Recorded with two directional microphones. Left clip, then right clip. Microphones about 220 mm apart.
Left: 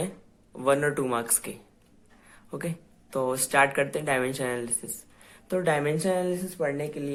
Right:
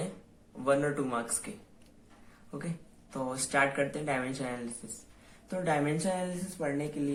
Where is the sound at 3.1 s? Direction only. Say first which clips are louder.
Left 7 dB; 45° left (ahead or behind).